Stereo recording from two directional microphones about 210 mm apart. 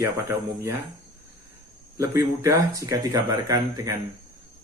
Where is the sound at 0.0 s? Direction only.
15° right (ahead or behind).